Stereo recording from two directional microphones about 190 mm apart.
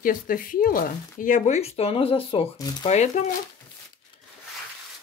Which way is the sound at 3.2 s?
40° left (ahead or behind).